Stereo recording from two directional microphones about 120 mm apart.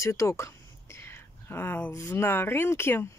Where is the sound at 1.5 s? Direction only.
20° left (ahead or behind).